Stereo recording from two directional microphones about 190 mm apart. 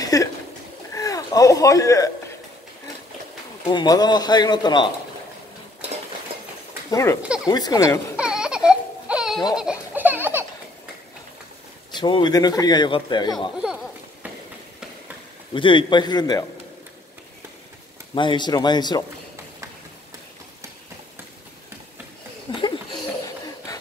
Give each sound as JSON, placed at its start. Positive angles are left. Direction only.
{"t": 0.0, "sound": "a sound", "side_deg": 20}
{"t": 3.6, "sound": "speech", "side_deg": 20}
{"t": 6.9, "sound": "speech", "side_deg": 15}
{"t": 8.2, "sound": "baby cry", "side_deg": -5}
{"t": 9.5, "sound": "baby laughter", "side_deg": -5}
{"t": 11.9, "sound": "speech", "side_deg": 25}
{"t": 15.5, "sound": "speech", "side_deg": 25}
{"t": 18.1, "sound": "speech", "side_deg": 25}
{"t": 22.5, "sound": "a sound", "side_deg": 25}